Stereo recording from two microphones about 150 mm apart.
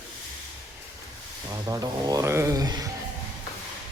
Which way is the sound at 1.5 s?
25° right (ahead or behind).